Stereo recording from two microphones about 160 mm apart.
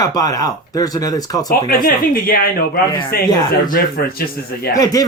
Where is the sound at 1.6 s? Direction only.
65° left (ahead or behind).